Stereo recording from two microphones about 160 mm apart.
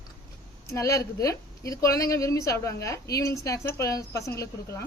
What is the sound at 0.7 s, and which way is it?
A woman's voice, 20° left (ahead or behind).